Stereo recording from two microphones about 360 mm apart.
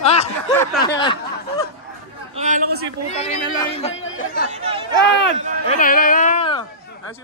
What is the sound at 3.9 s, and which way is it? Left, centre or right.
Speech, left.